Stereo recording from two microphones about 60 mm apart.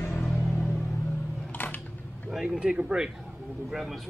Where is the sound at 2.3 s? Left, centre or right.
Centre.